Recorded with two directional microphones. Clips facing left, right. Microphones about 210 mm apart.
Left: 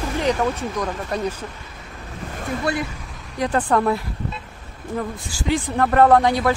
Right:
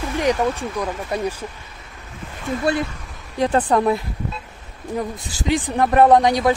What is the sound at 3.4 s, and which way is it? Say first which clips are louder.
Speech: right 2 dB; 25° right (ahead or behind).